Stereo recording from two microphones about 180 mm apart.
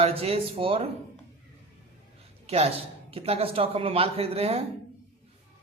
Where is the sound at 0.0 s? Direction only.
35° right (ahead or behind).